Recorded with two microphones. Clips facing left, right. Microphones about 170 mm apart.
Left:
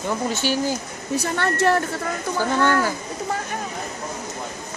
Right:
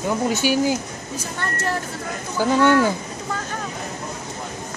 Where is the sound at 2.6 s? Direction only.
20° right (ahead or behind).